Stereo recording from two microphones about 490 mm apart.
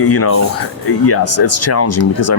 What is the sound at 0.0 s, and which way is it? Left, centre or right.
Speech, left.